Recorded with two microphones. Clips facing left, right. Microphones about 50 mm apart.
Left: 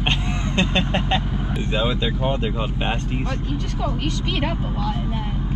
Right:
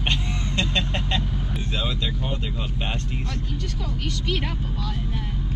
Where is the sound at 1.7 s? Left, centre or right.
Left.